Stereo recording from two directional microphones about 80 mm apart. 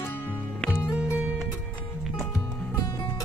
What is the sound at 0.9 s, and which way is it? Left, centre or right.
Music, centre.